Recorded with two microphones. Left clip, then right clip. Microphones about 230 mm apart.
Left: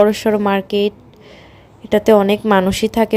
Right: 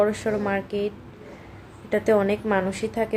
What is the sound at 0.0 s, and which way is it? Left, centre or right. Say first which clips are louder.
A woman's voice: left 9 dB; left.